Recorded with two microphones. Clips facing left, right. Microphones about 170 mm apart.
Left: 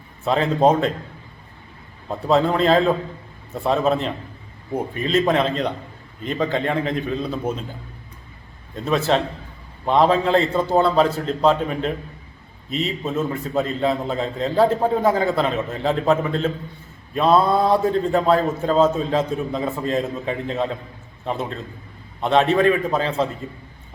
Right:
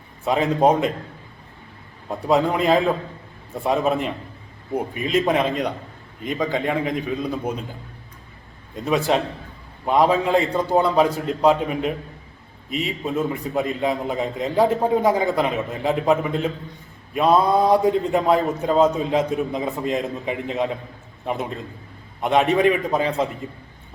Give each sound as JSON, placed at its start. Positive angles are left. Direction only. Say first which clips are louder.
{"t": 0.3, "sound": "a man's voice", "louder": "left 1 dB", "side_deg": -10}
{"t": 2.0, "sound": "a man's voice", "louder": "left 1 dB", "side_deg": -10}
{"t": 8.7, "sound": "a man's voice", "louder": "even", "side_deg": -10}